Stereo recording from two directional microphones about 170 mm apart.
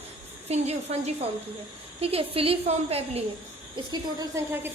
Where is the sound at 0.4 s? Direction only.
40° right (ahead or behind).